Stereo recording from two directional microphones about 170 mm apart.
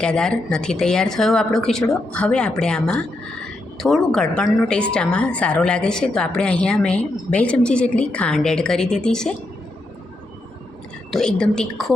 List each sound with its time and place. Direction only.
0.0 s a woman's voice: 5° left (ahead or behind)
11.1 s a woman's voice: 5° left (ahead or behind)